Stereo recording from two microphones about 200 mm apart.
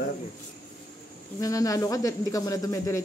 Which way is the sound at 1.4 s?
15° left (ahead or behind).